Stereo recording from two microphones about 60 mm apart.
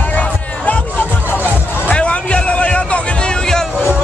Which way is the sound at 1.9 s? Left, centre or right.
Centre.